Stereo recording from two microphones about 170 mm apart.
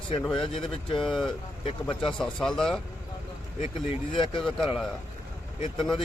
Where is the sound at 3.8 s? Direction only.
30° left (ahead or behind).